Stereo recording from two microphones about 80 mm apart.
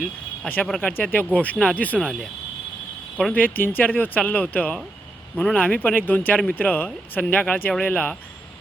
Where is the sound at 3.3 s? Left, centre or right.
Centre.